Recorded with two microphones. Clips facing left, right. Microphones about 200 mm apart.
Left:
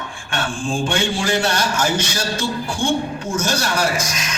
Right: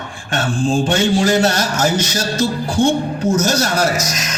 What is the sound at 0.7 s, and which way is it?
A woman's voice, 40° right (ahead or behind).